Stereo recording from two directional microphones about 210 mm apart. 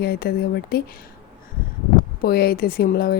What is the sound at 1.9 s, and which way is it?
Speech, 45° left (ahead or behind).